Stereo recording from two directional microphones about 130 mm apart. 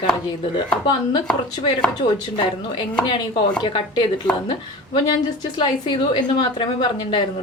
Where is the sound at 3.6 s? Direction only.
40° left (ahead or behind).